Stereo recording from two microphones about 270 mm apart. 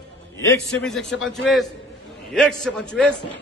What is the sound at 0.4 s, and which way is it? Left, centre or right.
A man's voice, centre.